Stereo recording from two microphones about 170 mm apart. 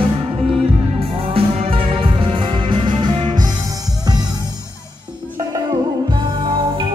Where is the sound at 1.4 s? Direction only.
30° right (ahead or behind).